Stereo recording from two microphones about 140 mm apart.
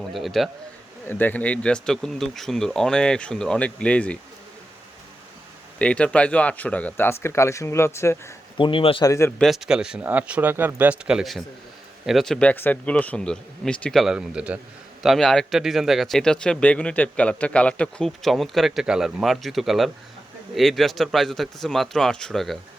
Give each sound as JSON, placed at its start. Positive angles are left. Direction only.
{"t": 0.1, "sound": "speech", "side_deg": 0}
{"t": 1.0, "sound": "speech", "side_deg": 15}
{"t": 5.8, "sound": "speech", "side_deg": 10}
{"t": 8.5, "sound": "speech", "side_deg": 35}
{"t": 9.0, "sound": "speech", "side_deg": 20}
{"t": 9.4, "sound": "speech", "side_deg": 0}